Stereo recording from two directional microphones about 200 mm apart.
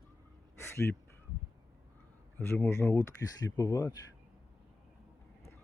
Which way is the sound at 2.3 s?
10° left (ahead or behind).